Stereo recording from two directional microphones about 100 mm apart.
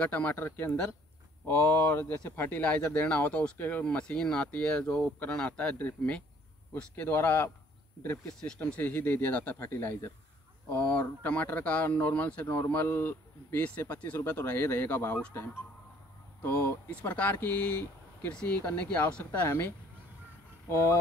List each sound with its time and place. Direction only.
0.0 s speech: 15° left (ahead or behind)
8.5 s speech: 15° left (ahead or behind)